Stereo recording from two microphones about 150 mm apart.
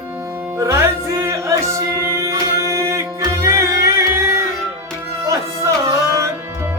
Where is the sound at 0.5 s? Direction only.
20° right (ahead or behind).